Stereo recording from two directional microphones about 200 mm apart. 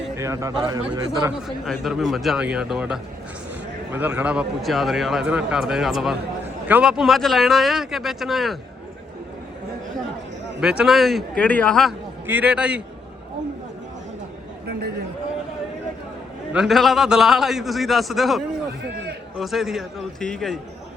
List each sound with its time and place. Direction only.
0.2 s speech: 15° right (ahead or behind)
1.5 s speech: centre (ahead or behind)
10.6 s speech: 5° right (ahead or behind)
14.7 s a sound: 55° right (ahead or behind)
16.5 s speech: centre (ahead or behind)